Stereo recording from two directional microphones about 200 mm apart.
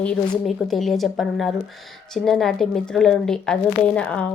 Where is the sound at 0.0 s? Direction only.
5° left (ahead or behind).